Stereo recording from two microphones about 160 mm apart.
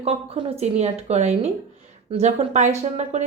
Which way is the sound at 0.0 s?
40° right (ahead or behind).